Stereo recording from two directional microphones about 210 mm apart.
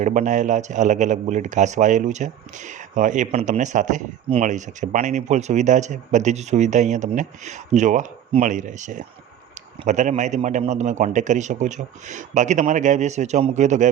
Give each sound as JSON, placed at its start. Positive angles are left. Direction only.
{"t": 0.0, "sound": "a man's voice", "side_deg": -35}